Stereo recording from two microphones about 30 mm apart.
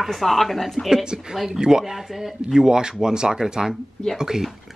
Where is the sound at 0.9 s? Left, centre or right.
Right; by 2.3 s centre.